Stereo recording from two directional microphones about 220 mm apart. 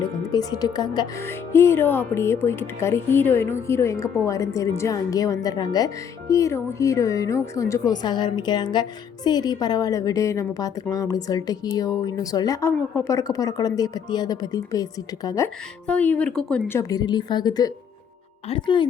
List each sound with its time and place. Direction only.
0.3 s speech: 20° left (ahead or behind)
15.9 s speech: 5° left (ahead or behind); by 18.9 s 20° left (ahead or behind)